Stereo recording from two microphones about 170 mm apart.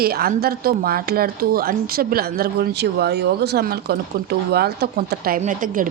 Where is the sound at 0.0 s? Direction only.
65° right (ahead or behind).